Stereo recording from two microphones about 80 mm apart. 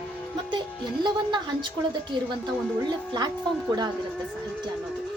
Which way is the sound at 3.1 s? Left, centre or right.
Right.